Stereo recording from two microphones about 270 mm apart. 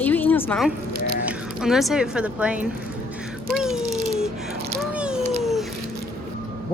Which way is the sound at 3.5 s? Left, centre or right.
Centre.